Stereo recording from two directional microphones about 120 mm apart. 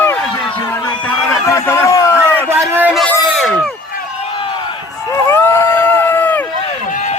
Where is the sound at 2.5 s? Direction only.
20° right (ahead or behind).